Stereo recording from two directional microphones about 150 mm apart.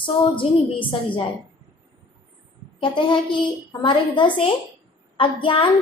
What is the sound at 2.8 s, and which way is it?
A woman's voice, 35° left (ahead or behind).